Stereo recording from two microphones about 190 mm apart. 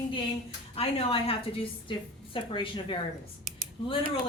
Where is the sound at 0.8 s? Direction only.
30° left (ahead or behind).